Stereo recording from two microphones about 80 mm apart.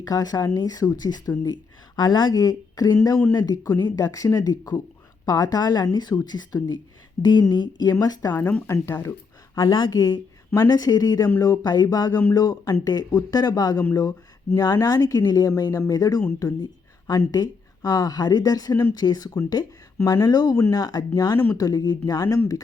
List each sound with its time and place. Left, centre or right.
0.0 s a woman's voice: left
8.3 s speech: left
9.6 s a woman's voice: left
18.7 s speech: left
18.9 s a woman's voice: left